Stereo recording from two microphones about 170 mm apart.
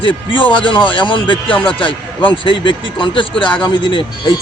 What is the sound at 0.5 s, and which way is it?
A man's voice, 30° left (ahead or behind).